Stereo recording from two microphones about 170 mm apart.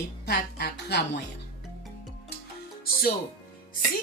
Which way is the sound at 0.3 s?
75° left (ahead or behind).